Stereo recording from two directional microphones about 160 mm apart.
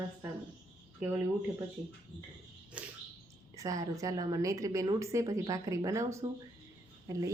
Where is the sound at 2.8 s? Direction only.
5° right (ahead or behind).